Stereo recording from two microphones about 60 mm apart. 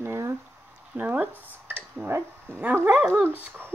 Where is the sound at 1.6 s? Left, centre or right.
Right.